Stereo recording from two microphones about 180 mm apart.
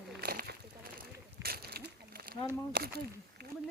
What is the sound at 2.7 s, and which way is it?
Speech, 65° right (ahead or behind).